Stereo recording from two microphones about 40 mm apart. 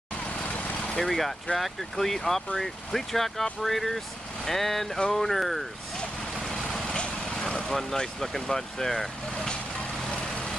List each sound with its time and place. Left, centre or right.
0.7 s speech: centre
6.4 s vehicle: centre
6.8 s vehicle: left
7.6 s speech: centre
10.1 s vehicle: left